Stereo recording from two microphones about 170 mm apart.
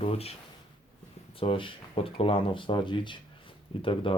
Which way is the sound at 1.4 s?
30° left (ahead or behind).